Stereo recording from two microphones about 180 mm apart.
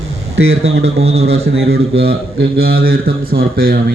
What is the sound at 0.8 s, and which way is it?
Speech, 35° right (ahead or behind).